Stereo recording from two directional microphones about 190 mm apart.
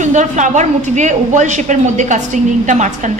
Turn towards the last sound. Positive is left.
turn(degrees=-40)  # may be behind; listen again after turning